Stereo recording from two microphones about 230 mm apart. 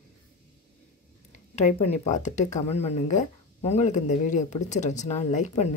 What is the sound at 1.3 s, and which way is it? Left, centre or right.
Speech, left.